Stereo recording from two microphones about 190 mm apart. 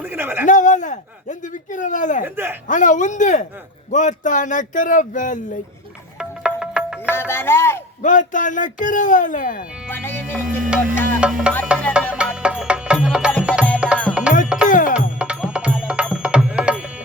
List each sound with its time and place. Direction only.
0.0 s a sound: 10° right (ahead or behind)
0.4 s speech: 40° left (ahead or behind)
2.2 s a man's voice: 10° right (ahead or behind)
2.6 s speech: 40° left (ahead or behind)
6.1 s music: 5° right (ahead or behind)
7.1 s music: 10° left (ahead or behind)
8.0 s speech: 40° left (ahead or behind)
9.9 s music: 10° left (ahead or behind)
11.2 s music: 5° right (ahead or behind)
14.7 s music: 45° left (ahead or behind)
15.2 s music: 5° right (ahead or behind)